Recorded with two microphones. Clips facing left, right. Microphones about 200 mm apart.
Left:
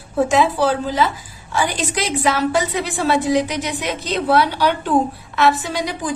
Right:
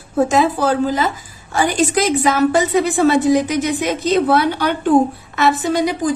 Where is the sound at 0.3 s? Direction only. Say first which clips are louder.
Right 1 dB; 45° right (ahead or behind).